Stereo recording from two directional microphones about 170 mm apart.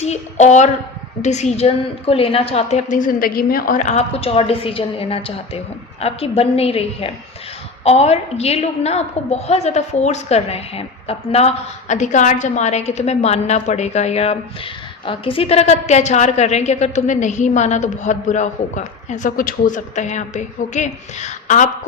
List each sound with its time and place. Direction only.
0.0 s a woman's voice: 40° left (ahead or behind)